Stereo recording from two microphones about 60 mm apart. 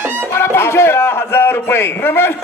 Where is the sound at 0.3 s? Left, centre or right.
Left.